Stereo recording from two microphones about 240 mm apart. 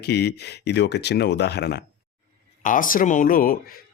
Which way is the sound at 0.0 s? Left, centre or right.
Left.